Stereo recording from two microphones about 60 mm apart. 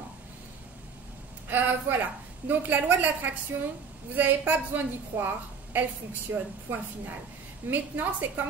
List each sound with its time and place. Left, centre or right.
1.5 s a woman's voice: right
6.7 s a woman's voice: right